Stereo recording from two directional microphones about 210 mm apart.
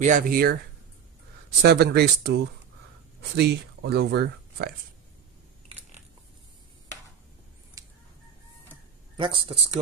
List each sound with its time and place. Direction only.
0.0 s speech: 40° right (ahead or behind)
1.6 s speech: 50° right (ahead or behind)
5.8 s biting: 35° right (ahead or behind)
7.8 s chicken: 15° right (ahead or behind)
9.1 s speech: 25° right (ahead or behind)